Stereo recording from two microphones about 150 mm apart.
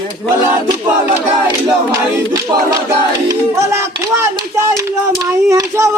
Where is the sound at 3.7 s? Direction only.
20° right (ahead or behind).